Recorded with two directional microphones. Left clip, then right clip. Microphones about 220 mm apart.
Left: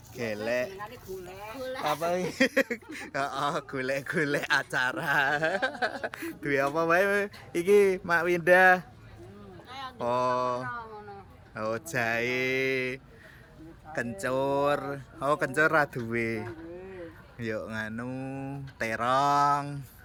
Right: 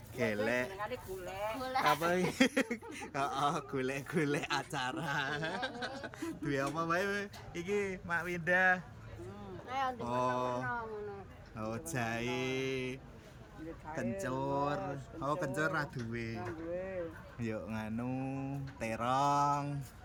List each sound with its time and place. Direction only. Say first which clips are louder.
0.2 s speech: left 4 dB; 5° right (ahead or behind); by 8.8 s 25° left (ahead or behind)
9.6 s a sound: right 5 dB; 15° right (ahead or behind)
10.0 s speech: left 7 dB; 5° left (ahead or behind)
17.4 s speech: left 8 dB; centre (ahead or behind)